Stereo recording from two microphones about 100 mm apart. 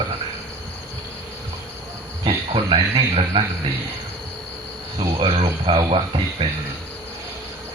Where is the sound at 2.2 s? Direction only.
65° right (ahead or behind).